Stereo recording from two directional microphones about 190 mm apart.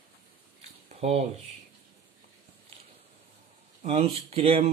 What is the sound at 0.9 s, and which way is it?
Speech, 35° right (ahead or behind).